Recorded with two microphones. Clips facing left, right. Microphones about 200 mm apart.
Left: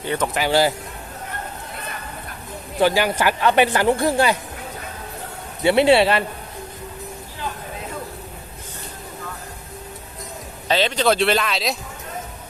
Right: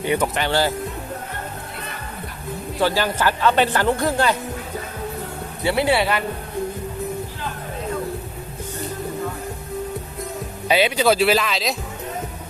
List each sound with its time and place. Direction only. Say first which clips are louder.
0.0 s speech: right 3 dB; 15° right (ahead or behind)
0.3 s a woman's voice: left 2 dB; 10° left (ahead or behind)
2.8 s a woman's voice: left 2 dB; 15° left (ahead or behind)
5.6 s speech: left 5 dB; 25° left (ahead or behind)
10.7 s speech: right 1 dB; 10° right (ahead or behind)